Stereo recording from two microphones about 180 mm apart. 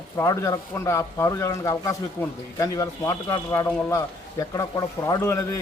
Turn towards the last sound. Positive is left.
turn(degrees=15)  # may be behind; listen again after turning